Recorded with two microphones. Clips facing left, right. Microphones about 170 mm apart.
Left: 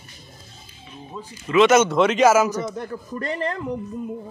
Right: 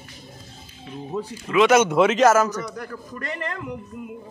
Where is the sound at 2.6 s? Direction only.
25° left (ahead or behind).